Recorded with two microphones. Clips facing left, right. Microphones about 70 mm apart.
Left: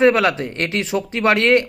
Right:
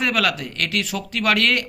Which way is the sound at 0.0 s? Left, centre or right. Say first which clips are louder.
Left 7 dB; left.